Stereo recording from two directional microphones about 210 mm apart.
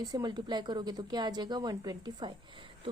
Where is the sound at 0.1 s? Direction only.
20° right (ahead or behind).